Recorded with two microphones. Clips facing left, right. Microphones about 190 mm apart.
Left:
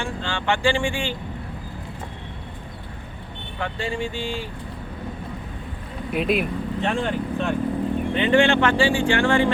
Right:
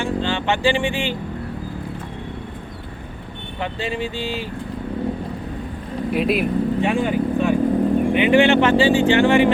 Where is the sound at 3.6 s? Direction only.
20° right (ahead or behind).